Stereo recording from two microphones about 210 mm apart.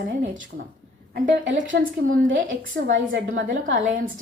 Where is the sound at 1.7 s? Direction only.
55° right (ahead or behind).